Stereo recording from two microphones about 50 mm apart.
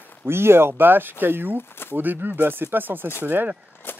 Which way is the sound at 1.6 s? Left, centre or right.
Left.